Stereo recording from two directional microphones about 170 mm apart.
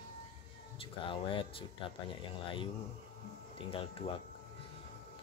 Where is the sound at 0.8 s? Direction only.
30° left (ahead or behind).